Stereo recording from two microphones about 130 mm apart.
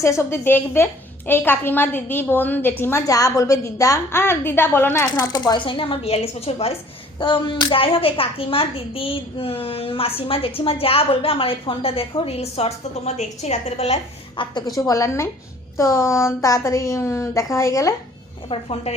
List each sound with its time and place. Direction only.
0.0 s a woman's voice: 20° left (ahead or behind)
5.2 s a woman's voice: 30° left (ahead or behind); by 6.7 s 50° left (ahead or behind)
7.2 s a woman's voice: 40° left (ahead or behind); by 14.0 s 55° left (ahead or behind)
14.4 s a woman's voice: 40° left (ahead or behind)
14.8 s speech: 25° left (ahead or behind)
18.4 s a woman's voice: 45° left (ahead or behind)